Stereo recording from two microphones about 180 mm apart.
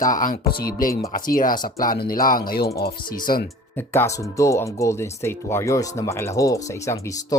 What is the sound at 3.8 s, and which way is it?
Speech, 15° left (ahead or behind).